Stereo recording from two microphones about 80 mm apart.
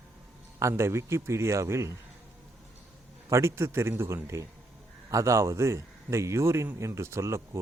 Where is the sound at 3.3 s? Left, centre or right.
Right.